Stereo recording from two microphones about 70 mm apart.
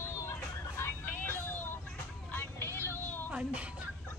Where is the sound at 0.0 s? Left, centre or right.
Left.